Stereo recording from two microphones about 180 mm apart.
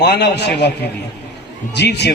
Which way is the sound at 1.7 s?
70° left (ahead or behind).